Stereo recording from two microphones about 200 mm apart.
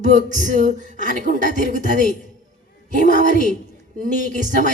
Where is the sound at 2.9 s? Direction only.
40° right (ahead or behind).